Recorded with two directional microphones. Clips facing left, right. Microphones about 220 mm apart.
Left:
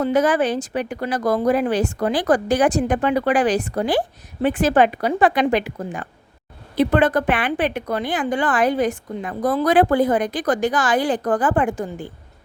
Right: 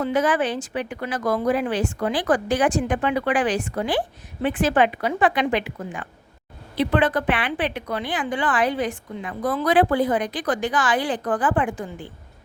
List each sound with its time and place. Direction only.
0.0 s a woman's voice: 40° left (ahead or behind)